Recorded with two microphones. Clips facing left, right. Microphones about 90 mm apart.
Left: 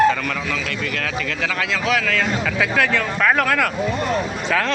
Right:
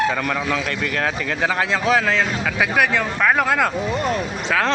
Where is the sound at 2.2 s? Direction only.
15° right (ahead or behind).